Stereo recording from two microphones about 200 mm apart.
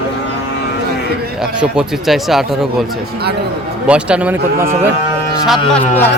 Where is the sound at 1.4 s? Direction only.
5° right (ahead or behind).